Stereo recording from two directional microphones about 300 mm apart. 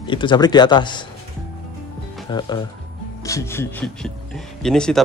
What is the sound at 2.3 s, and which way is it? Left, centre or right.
Speech, centre.